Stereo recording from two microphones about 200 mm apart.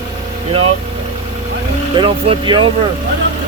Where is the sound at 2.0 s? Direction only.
25° right (ahead or behind).